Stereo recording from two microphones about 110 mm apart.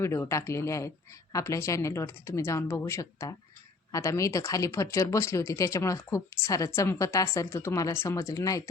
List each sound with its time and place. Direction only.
0.0 s speech: 25° left (ahead or behind)